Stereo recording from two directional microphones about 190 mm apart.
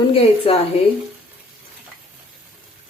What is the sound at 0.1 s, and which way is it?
Speech, 30° left (ahead or behind).